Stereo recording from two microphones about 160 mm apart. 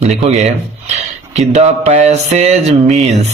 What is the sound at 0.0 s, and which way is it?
Speech, 45° right (ahead or behind).